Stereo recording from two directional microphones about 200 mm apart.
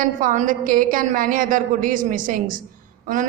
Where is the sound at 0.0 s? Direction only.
40° right (ahead or behind).